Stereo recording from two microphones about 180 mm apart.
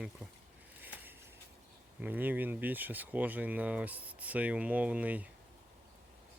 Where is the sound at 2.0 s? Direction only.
10° right (ahead or behind).